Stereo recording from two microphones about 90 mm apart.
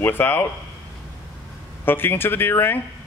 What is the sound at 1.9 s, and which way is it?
Speech, 25° left (ahead or behind).